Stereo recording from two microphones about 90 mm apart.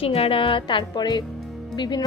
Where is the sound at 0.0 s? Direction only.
90° left.